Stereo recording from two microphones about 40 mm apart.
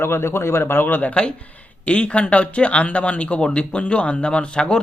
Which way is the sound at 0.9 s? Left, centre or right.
Left.